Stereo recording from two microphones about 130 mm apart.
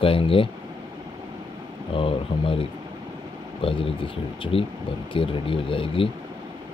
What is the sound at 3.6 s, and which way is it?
Speech, 45° left (ahead or behind).